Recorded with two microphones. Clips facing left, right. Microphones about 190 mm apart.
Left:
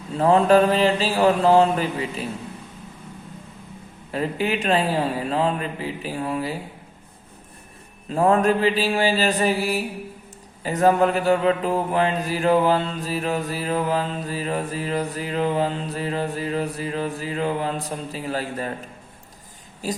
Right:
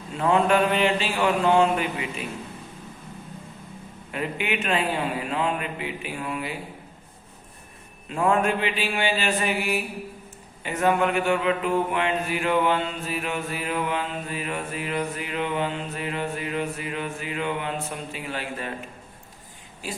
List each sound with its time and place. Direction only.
0.1 s mantra: 35° left (ahead or behind)
4.1 s mantra: 35° left (ahead or behind)
8.1 s mantra: 35° left (ahead or behind)
19.8 s speech: 40° left (ahead or behind)